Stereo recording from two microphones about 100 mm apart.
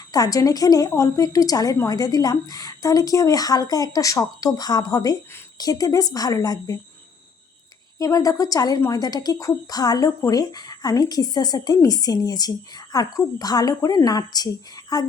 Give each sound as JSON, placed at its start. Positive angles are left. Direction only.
{"t": 0.1, "sound": "a woman's voice", "side_deg": 35}
{"t": 7.9, "sound": "a woman's voice", "side_deg": 35}